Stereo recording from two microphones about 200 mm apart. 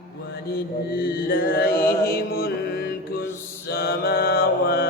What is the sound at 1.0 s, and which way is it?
Mantra, 50° left (ahead or behind).